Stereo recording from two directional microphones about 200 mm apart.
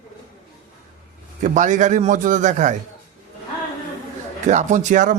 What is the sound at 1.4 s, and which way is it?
A man's voice, 40° right (ahead or behind).